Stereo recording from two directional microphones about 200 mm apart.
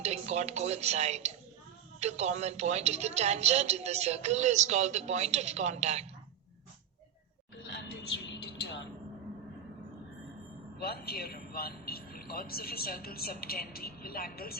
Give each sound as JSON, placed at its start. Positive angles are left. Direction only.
{"t": 0.0, "sound": "a woman's voice", "side_deg": -35}
{"t": 10.8, "sound": "a man's voice", "side_deg": 50}